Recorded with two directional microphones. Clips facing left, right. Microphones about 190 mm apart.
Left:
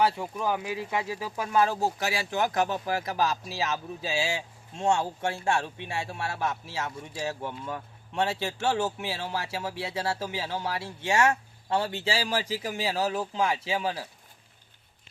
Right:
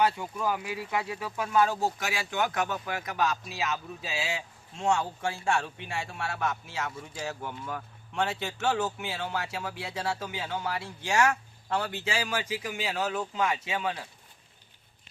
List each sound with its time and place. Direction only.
0.4 s speech: 25° left (ahead or behind)